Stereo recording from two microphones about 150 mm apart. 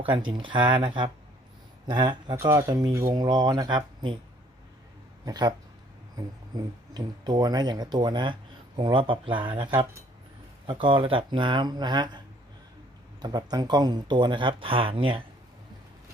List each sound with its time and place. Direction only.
0.0 s speech: 35° right (ahead or behind)
2.3 s speech: 20° right (ahead or behind)
5.2 s speech: 25° right (ahead or behind)
6.9 s speech: 25° right (ahead or behind)
13.2 s speech: 25° right (ahead or behind)